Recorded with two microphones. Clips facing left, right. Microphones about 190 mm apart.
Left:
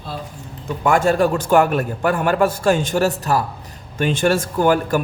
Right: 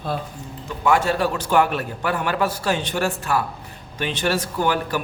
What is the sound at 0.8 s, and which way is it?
A man's voice, 50° left (ahead or behind).